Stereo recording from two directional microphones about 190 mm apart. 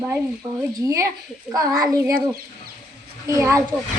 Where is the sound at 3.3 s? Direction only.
15° right (ahead or behind).